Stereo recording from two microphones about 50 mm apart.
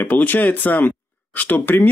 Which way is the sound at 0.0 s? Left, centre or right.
Left.